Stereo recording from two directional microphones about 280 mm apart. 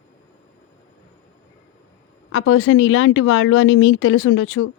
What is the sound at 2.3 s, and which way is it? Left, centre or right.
Speech, left.